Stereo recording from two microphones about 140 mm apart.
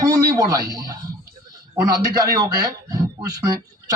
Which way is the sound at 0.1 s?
25° right (ahead or behind).